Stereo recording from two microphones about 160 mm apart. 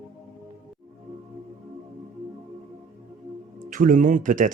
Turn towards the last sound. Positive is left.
turn(degrees=-55)  # may be behind; listen again after turning